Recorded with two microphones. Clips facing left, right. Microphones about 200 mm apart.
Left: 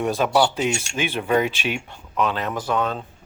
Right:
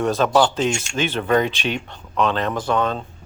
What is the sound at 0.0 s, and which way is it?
Speech, 15° left (ahead or behind).